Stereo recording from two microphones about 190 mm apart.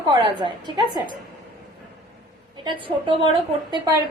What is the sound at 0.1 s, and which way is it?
Speech, 25° right (ahead or behind).